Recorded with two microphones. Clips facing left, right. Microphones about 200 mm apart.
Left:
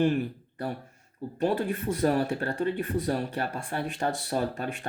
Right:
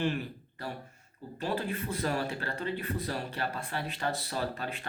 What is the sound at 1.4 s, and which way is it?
Speech, 50° left (ahead or behind).